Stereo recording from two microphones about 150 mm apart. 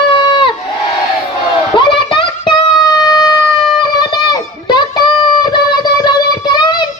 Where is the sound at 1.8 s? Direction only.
35° left (ahead or behind).